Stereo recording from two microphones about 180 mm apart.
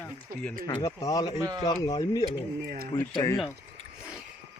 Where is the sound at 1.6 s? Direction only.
20° left (ahead or behind).